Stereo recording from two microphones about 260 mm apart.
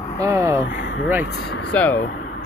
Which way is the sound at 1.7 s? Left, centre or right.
Centre.